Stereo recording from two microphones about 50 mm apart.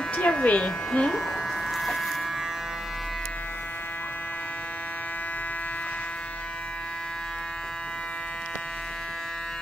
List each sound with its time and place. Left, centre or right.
0.1 s speech: left
1.7 s electric shaver: centre